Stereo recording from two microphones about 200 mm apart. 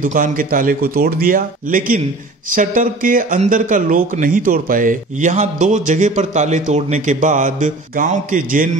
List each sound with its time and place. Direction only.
0.0 s a man's voice: 40° right (ahead or behind)